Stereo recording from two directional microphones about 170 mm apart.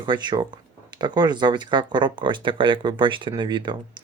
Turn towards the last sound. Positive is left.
turn(degrees=-25)  # may be behind; listen again after turning